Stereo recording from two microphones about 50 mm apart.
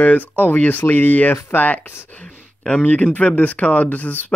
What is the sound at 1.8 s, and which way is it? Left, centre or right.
Speech, left.